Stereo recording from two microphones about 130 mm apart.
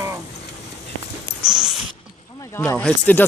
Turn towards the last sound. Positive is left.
turn(degrees=10)  # may be behind; listen again after turning